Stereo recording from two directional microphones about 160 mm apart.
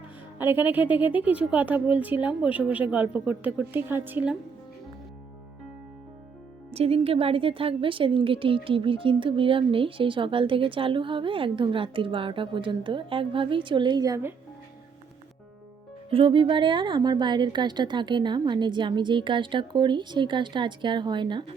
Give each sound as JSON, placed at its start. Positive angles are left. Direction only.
{"t": 0.3, "sound": "a woman's voice", "side_deg": -10}
{"t": 6.7, "sound": "a woman's voice", "side_deg": -40}
{"t": 16.0, "sound": "a woman's voice", "side_deg": -35}